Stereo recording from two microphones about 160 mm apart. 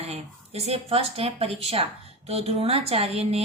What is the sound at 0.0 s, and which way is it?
Speech, 40° right (ahead or behind).